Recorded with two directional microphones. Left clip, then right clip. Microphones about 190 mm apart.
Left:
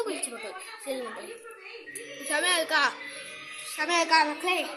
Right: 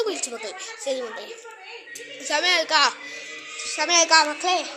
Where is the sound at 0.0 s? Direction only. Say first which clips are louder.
Right 6 dB; 10° right (ahead or behind).